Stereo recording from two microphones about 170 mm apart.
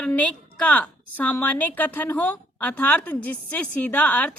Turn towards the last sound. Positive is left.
turn(degrees=10)  # may be behind; listen again after turning